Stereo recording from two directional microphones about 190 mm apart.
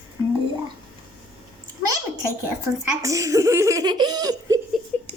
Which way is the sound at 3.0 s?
15° right (ahead or behind).